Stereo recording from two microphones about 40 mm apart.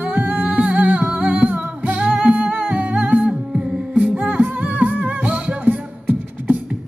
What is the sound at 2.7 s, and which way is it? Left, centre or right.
Humming, right.